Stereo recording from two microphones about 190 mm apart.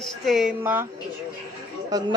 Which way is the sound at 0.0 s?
Centre (ahead or behind).